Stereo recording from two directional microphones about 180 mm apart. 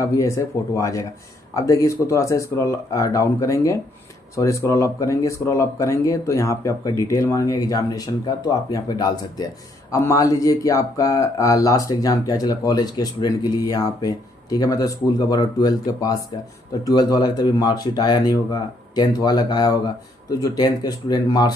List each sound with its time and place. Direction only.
0.0 s speech: 15° left (ahead or behind)